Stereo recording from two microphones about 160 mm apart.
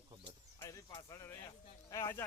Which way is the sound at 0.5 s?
20° left (ahead or behind).